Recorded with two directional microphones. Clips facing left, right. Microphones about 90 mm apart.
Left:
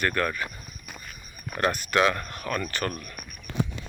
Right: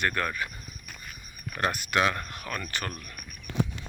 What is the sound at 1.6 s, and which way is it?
Speech, 15° right (ahead or behind).